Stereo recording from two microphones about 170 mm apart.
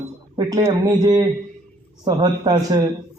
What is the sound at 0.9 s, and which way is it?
A man's voice, 20° right (ahead or behind).